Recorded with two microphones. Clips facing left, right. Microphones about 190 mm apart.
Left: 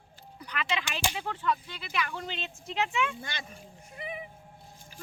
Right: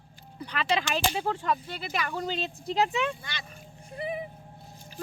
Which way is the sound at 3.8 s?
35° right (ahead or behind).